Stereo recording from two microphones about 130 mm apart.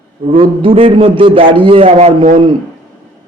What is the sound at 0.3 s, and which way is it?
A man's voice, 45° right (ahead or behind).